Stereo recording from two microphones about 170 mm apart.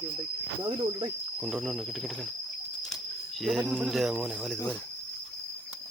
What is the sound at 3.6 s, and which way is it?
Speech, centre (ahead or behind).